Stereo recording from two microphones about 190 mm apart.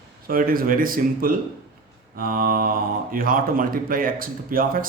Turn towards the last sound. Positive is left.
turn(degrees=-50)  # may be behind; listen again after turning